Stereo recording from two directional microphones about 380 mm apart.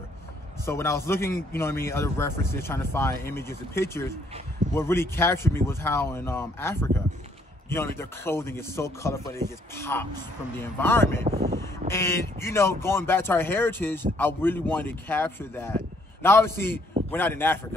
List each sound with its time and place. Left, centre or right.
0.7 s a man's voice: centre
11.2 s speech: right
11.9 s speech: centre